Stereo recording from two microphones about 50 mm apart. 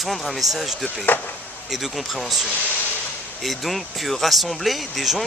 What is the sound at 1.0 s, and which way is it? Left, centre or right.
Speech, left.